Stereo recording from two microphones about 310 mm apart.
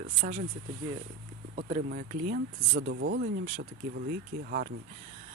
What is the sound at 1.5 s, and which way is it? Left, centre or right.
Speech, right.